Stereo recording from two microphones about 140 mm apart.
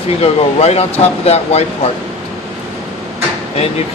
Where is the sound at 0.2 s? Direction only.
50° left (ahead or behind).